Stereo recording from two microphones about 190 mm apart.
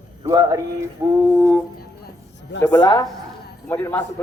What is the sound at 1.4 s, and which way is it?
Music, 10° right (ahead or behind).